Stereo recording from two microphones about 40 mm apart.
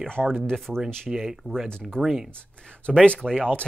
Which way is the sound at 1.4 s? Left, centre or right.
Right.